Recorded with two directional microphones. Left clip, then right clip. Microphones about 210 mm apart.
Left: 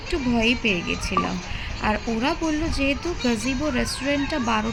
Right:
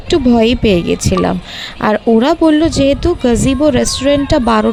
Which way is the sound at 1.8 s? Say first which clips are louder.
Right 13 dB; 45° right (ahead or behind).